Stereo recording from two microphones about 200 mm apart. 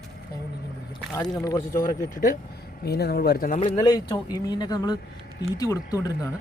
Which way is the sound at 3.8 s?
20° left (ahead or behind).